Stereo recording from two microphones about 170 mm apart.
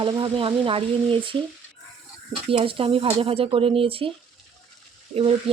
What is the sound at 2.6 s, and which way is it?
Speech, 30° right (ahead or behind).